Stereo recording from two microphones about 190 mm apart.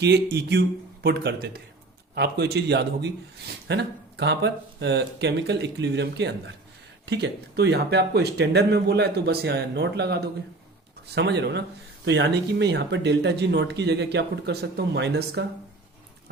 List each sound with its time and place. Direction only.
1.0 s speech: 60° right (ahead or behind)